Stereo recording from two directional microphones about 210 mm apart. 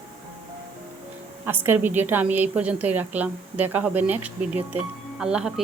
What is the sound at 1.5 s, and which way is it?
A woman's voice, 10° right (ahead or behind).